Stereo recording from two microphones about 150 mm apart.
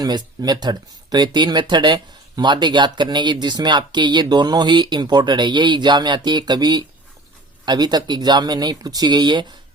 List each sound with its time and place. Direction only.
0.0 s speech: 30° right (ahead or behind)